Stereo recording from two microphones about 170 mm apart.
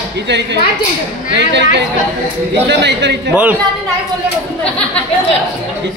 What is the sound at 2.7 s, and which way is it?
Speech, 90° right.